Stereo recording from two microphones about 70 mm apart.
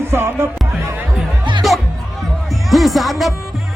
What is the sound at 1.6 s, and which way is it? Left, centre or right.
Music, centre.